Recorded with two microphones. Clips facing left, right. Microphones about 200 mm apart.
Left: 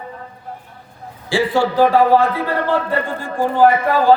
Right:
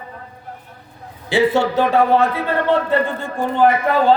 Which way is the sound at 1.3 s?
20° right (ahead or behind).